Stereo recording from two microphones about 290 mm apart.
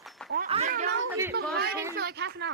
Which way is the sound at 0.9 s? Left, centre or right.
Right.